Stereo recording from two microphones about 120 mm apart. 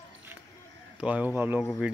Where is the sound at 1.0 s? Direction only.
10° right (ahead or behind).